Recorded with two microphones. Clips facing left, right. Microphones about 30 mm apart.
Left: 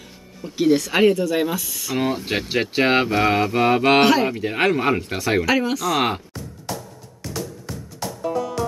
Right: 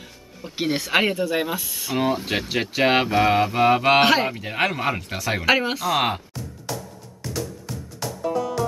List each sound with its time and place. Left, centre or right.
0.6 s speech: right
2.0 s speech: centre
4.0 s speech: centre
4.3 s speech: centre
5.4 s speech: right
5.9 s speech: centre
8.2 s music: centre